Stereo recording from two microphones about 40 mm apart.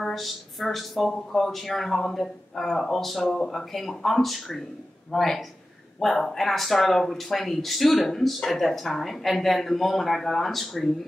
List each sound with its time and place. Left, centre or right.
0.0 s speech: centre